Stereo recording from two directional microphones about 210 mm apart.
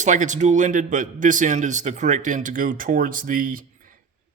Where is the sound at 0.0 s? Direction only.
35° right (ahead or behind).